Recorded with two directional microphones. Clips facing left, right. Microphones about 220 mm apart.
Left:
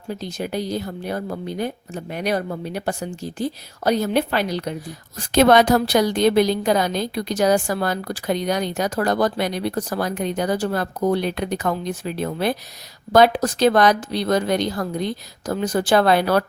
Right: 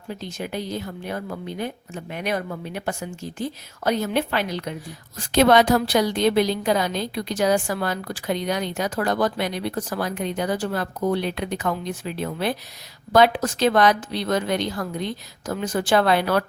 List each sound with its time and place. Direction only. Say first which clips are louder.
0.1 s a woman's voice: left 4 dB; 35° left (ahead or behind)